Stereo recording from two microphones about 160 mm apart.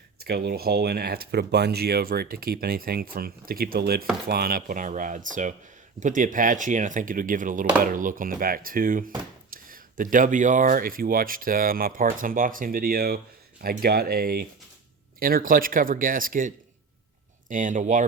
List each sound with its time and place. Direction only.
0.3 s speech: 80° right; by 16.5 s 60° right (ahead or behind)
17.5 s speech: 55° right (ahead or behind)